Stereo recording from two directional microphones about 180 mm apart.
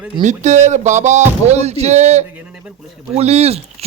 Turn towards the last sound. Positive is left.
turn(degrees=-35)  # may be behind; listen again after turning